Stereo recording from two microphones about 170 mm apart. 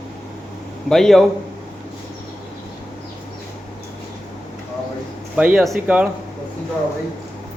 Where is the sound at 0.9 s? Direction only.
Centre (ahead or behind).